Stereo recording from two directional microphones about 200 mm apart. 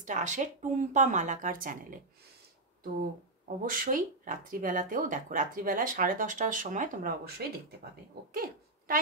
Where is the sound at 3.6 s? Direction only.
45° right (ahead or behind).